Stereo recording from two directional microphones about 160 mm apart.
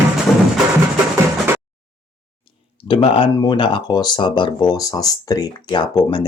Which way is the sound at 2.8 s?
30° left (ahead or behind).